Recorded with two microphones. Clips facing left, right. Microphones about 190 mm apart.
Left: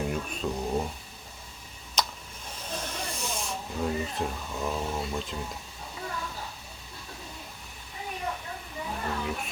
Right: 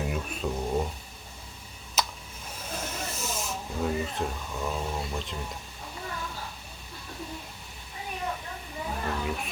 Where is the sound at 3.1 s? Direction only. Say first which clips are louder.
Even; 5° right (ahead or behind).